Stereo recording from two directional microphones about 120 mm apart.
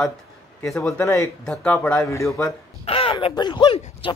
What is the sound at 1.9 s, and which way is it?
Speech, 25° left (ahead or behind).